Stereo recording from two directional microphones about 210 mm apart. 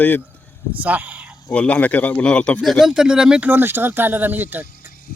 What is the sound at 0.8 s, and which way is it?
Speech, 10° right (ahead or behind).